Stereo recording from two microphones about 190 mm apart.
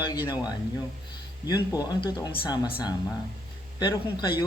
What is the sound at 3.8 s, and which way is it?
Speech, 20° left (ahead or behind).